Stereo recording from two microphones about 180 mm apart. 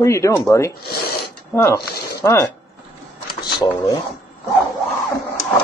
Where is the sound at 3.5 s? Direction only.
20° left (ahead or behind).